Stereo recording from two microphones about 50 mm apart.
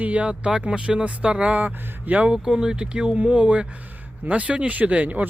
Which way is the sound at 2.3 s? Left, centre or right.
Centre.